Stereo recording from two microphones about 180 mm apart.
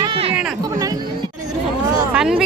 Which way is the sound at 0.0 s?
30° right (ahead or behind).